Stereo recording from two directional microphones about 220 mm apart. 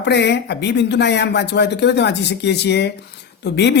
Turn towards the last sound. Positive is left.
turn(degrees=50)  # may be behind; listen again after turning